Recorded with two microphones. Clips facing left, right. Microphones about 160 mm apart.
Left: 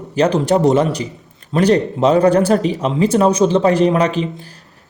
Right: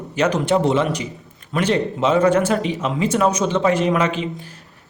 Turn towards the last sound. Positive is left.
turn(degrees=35)  # may be behind; listen again after turning